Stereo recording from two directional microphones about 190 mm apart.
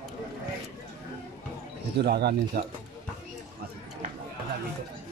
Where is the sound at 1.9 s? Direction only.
55° right (ahead or behind).